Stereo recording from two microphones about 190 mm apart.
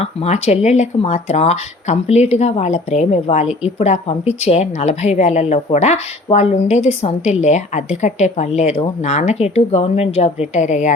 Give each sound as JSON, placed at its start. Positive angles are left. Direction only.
{"t": 0.0, "sound": "a woman's voice", "side_deg": 30}